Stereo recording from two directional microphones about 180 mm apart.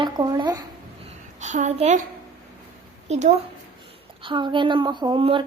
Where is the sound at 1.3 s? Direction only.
40° right (ahead or behind).